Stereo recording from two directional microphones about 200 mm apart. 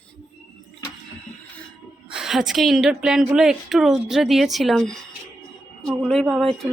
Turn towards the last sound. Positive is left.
turn(degrees=0)  # may be behind; listen again after turning